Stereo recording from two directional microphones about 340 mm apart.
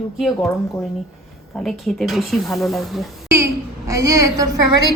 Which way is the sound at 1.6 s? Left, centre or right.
Centre.